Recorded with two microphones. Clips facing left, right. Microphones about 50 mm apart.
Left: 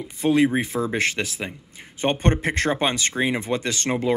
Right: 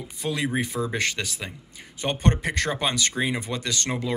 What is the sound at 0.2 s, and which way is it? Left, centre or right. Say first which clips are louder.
Speech: left 8 dB; left.